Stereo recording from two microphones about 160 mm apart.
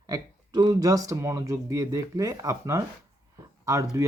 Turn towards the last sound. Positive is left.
turn(degrees=-20)  # may be behind; listen again after turning